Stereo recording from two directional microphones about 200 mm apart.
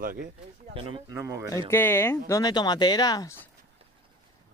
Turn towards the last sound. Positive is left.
turn(degrees=20)  # may be behind; listen again after turning